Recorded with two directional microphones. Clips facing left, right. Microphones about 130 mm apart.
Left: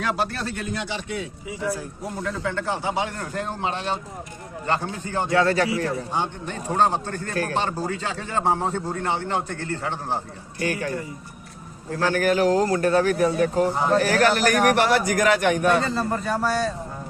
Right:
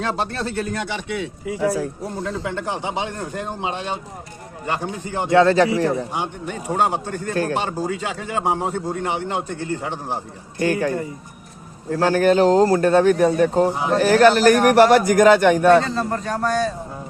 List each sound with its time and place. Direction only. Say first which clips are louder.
0.0 s speech: right 2 dB; 30° right (ahead or behind)
0.7 s a man's voice: right 3 dB; 55° right (ahead or behind); by 1.9 s 90° right
2.2 s a man's voice: even; 25° right (ahead or behind)
5.4 s speech: right 7 dB; 25° right (ahead or behind)
6.1 s a man's voice: right 1 dB; 10° right (ahead or behind)
10.6 s speech: right 6 dB; 30° right (ahead or behind)
13.7 s a man's voice: right 1 dB; 10° right (ahead or behind)
14.0 s speech: right 12 dB; 30° right (ahead or behind)
15.8 s speech: right 1 dB; 5° left (ahead or behind)